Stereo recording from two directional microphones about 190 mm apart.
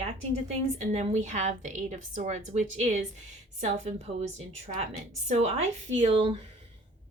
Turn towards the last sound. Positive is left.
turn(degrees=-30)  # may be behind; listen again after turning